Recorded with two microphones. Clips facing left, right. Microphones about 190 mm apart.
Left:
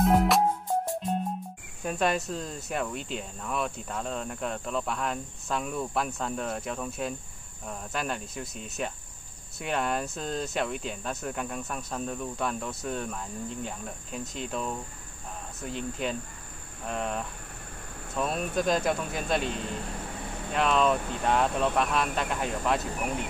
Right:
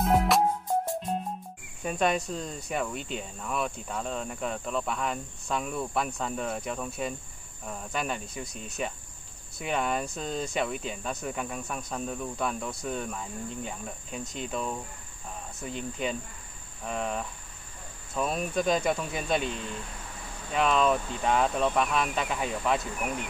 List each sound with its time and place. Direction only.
0.0 s music: centre (ahead or behind)
1.8 s speech: centre (ahead or behind)
19.4 s speech: 40° left (ahead or behind)
20.5 s speech: centre (ahead or behind)